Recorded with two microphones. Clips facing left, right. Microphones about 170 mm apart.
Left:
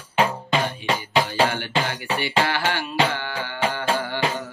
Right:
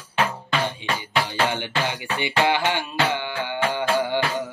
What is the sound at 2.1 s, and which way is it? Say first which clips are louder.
Music: right 2 dB; 20° right (ahead or behind).